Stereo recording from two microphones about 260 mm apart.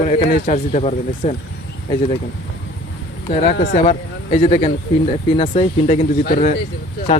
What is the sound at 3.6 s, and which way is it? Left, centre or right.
Speech, left.